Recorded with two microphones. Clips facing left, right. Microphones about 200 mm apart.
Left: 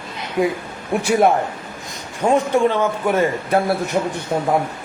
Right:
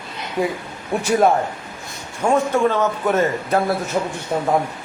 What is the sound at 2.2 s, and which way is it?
A man's voice, 15° left (ahead or behind).